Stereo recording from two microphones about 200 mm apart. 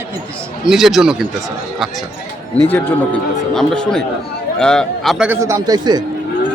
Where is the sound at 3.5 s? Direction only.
5° left (ahead or behind).